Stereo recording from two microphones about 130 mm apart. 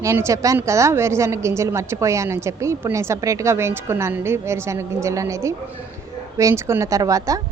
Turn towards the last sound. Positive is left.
turn(degrees=-25)  # may be behind; listen again after turning